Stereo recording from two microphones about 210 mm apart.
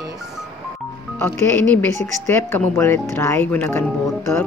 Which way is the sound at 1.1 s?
10° left (ahead or behind).